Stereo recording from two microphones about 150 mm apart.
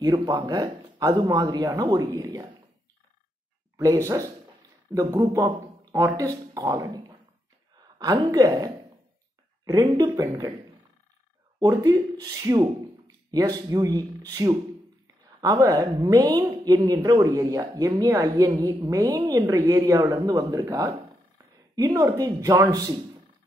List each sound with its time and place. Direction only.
0.0 s a woman's voice: 25° right (ahead or behind)
3.7 s a woman's voice: 20° right (ahead or behind)
11.6 s a woman's voice: 25° right (ahead or behind)